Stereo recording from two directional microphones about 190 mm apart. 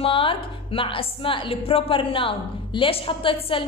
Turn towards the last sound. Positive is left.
turn(degrees=30)  # may be behind; listen again after turning